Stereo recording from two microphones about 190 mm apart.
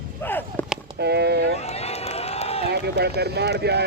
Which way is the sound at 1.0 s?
60° right (ahead or behind).